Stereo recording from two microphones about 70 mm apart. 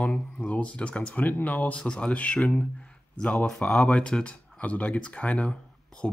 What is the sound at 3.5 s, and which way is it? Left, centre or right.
Speech, centre.